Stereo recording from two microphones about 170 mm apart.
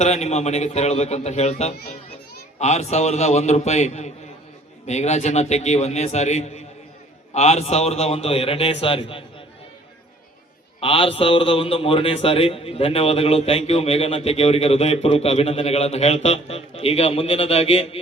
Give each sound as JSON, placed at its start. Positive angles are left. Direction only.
{"t": 0.0, "sound": "a man's voice", "side_deg": 40}
{"t": 10.8, "sound": "a man's voice", "side_deg": 30}